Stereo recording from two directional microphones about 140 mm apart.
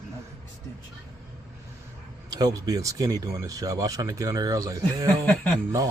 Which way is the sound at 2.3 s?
25° right (ahead or behind).